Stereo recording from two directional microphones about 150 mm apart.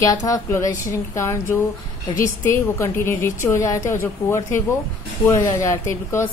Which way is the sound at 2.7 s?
15° left (ahead or behind).